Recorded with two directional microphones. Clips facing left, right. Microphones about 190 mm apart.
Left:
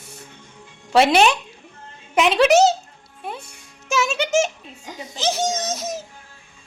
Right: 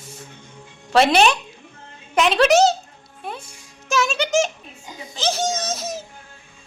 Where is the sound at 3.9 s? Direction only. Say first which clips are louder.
Even; 20° left (ahead or behind).